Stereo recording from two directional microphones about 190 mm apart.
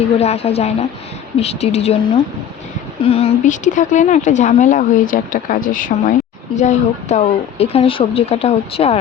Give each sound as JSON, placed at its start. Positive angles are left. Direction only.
{"t": 0.2, "sound": "speech", "side_deg": 30}
{"t": 3.0, "sound": "speech", "side_deg": 30}